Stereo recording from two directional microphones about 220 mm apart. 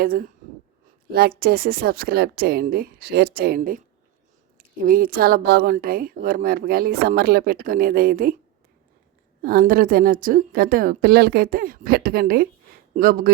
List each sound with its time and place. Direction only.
0.0 s a woman's voice: 40° right (ahead or behind)
1.4 s a woman's voice: 45° right (ahead or behind)
9.4 s a woman's voice: 40° right (ahead or behind)